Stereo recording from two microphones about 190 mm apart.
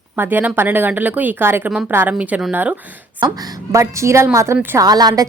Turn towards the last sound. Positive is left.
turn(degrees=-20)  # may be behind; listen again after turning